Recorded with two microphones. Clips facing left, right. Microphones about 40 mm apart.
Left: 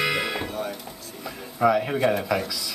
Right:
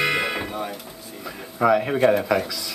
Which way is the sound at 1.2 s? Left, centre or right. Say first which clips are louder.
Even; centre.